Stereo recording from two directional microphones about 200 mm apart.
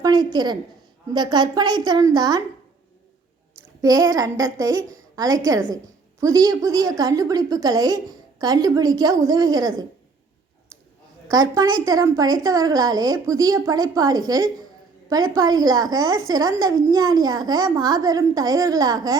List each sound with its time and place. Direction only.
0.0 s a woman's voice: 20° right (ahead or behind)
3.8 s a woman's voice: 20° right (ahead or behind)
11.3 s a woman's voice: 20° right (ahead or behind)